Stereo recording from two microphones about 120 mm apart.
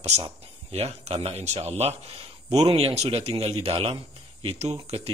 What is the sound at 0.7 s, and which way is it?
A man's voice, 60° right (ahead or behind).